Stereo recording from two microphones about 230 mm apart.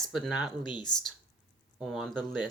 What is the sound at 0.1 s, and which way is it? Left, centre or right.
Speech, centre.